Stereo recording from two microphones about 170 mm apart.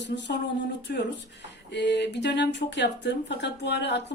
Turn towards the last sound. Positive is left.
turn(degrees=85)